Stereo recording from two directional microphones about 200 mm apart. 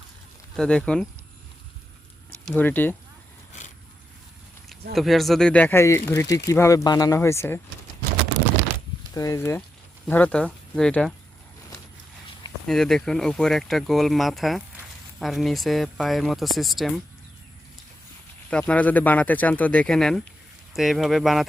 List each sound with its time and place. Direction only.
0.5 s speech: 5° left (ahead or behind)
2.5 s speech: 10° left (ahead or behind)
4.9 s speech: centre (ahead or behind)
9.1 s speech: 15° left (ahead or behind)
12.6 s speech: centre (ahead or behind)
18.5 s speech: 5° left (ahead or behind)